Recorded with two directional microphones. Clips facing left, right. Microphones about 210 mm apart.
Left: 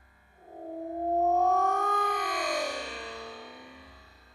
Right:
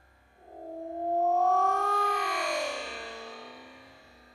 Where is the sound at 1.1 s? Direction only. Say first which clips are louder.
Even; 5° left (ahead or behind).